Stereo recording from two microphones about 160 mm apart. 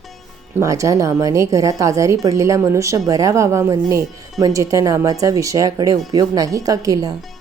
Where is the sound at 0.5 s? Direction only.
20° right (ahead or behind).